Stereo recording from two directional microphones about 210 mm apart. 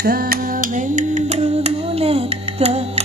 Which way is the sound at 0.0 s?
45° right (ahead or behind).